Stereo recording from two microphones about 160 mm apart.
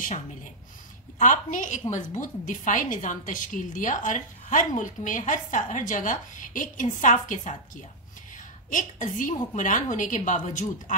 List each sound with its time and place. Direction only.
1.2 s a woman's voice: 55° left (ahead or behind)